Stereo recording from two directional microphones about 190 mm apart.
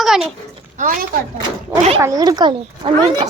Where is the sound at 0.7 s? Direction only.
45° right (ahead or behind).